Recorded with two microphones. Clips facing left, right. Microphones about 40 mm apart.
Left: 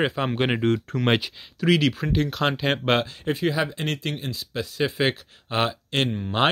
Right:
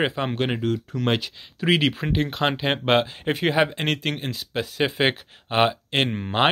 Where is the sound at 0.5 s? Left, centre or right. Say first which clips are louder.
Left 3 dB; left.